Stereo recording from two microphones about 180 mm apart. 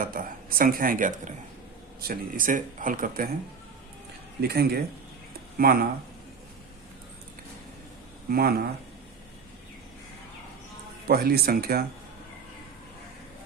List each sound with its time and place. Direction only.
0.0 s speech: 50° right (ahead or behind)
4.4 s speech: 60° right (ahead or behind)
8.3 s speech: 60° right (ahead or behind)
11.1 s speech: 60° right (ahead or behind)